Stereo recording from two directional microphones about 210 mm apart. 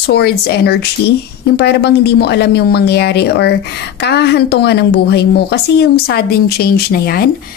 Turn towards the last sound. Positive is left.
turn(degrees=45)  # may be behind; listen again after turning